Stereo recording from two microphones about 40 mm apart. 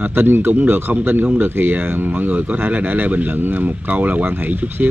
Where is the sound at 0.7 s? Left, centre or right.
Right.